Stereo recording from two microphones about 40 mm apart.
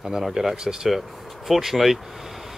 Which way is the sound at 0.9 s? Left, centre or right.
Centre.